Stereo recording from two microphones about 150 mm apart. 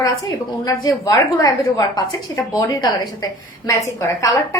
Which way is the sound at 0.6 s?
25° left (ahead or behind).